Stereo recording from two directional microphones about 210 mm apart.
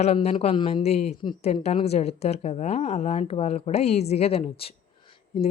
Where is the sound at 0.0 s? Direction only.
30° left (ahead or behind).